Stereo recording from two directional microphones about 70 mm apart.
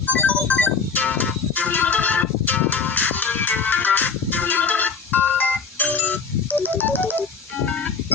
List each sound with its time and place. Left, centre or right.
0.1 s music: left